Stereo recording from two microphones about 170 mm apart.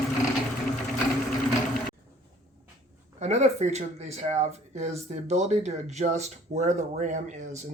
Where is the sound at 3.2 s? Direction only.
40° right (ahead or behind).